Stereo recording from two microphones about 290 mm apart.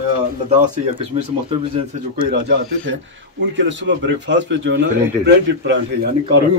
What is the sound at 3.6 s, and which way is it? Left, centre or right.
A man's voice, right.